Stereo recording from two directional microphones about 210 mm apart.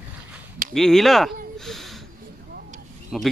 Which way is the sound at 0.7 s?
Centre (ahead or behind).